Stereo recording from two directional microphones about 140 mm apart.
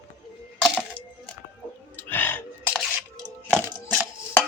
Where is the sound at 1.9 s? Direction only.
15° left (ahead or behind).